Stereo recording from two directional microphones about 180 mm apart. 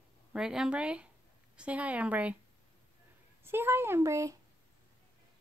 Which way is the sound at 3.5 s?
15° right (ahead or behind).